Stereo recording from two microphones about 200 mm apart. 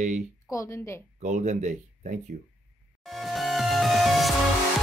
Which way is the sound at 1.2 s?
35° right (ahead or behind).